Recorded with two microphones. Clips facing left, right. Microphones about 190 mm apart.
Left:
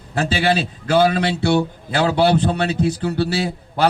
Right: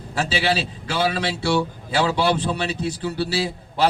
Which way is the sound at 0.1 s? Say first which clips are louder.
Left 4 dB; 55° left (ahead or behind).